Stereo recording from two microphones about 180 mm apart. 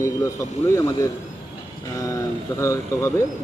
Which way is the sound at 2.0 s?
20° left (ahead or behind).